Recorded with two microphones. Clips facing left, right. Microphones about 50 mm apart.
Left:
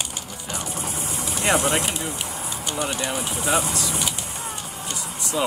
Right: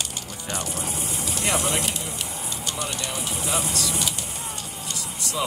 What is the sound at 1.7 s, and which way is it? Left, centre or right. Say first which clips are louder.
Speech: left 3 dB; centre.